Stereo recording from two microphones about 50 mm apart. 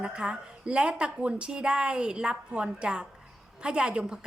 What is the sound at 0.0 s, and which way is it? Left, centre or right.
A woman's voice, right.